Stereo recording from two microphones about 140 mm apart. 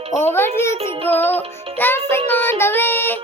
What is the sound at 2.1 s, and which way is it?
Child singing, 15° left (ahead or behind).